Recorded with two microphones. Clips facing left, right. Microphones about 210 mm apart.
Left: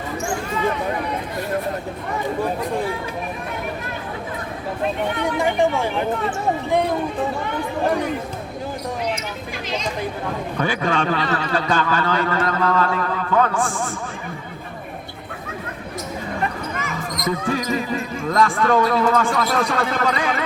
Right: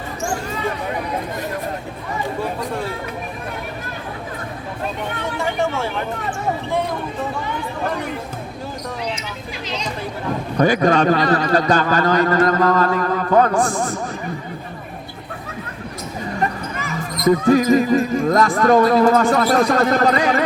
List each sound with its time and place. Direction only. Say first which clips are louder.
5.2 s speech: left 3 dB; 15° left (ahead or behind)
10.6 s a man's voice: right 7 dB; 40° right (ahead or behind)
16.4 s speech: right 4 dB; 35° right (ahead or behind)